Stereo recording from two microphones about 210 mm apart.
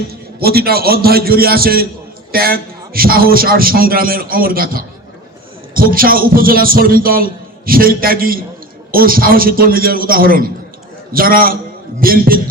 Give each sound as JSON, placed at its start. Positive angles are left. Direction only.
{"t": 0.1, "sound": "a man's voice", "side_deg": -45}